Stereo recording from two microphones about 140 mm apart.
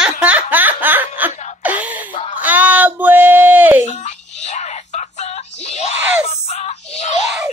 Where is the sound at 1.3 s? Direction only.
55° left (ahead or behind).